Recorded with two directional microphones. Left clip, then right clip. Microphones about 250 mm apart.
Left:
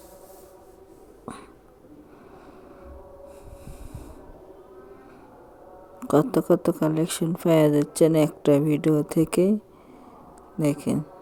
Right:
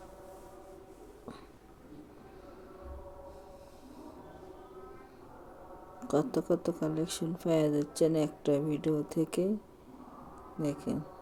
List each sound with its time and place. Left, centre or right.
6.0 s speech: left
10.6 s speech: left